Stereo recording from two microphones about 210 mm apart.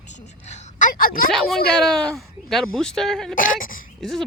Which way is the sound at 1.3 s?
Centre (ahead or behind).